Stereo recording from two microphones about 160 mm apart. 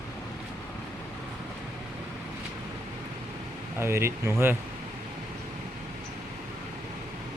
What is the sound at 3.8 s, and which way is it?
Speech, 15° right (ahead or behind).